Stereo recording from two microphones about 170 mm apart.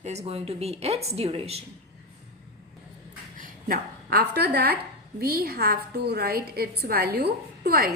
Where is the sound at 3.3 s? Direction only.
55° right (ahead or behind).